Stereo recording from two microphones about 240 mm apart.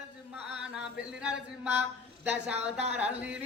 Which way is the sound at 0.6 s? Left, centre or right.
Centre.